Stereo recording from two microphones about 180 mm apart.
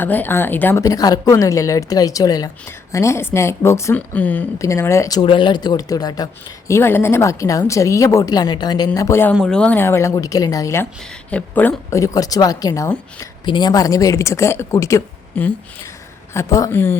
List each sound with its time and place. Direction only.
0.0 s speech: 10° left (ahead or behind)
9.3 s speech: 5° left (ahead or behind)